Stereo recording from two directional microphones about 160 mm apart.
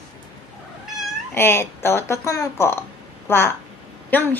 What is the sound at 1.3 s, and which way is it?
A woman's voice, 15° left (ahead or behind).